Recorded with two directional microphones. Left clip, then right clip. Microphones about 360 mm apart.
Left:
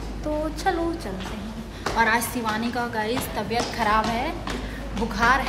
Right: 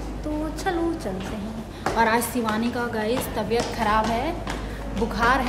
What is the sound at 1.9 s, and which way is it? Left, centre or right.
A woman's voice, centre.